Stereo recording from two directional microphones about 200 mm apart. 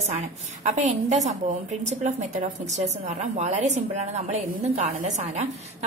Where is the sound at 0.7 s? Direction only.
35° right (ahead or behind).